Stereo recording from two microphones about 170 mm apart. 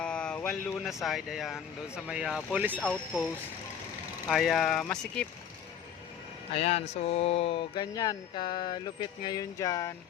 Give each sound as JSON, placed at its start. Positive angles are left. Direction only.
{"t": 0.0, "sound": "a sound", "side_deg": 5}
{"t": 1.0, "sound": "speech", "side_deg": 0}
{"t": 4.3, "sound": "speech", "side_deg": 0}
{"t": 6.5, "sound": "speech", "side_deg": 35}